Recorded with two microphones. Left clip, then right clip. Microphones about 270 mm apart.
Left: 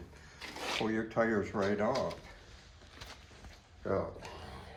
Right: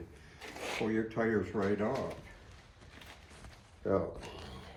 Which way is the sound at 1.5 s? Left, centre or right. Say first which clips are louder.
Left 1 dB; centre.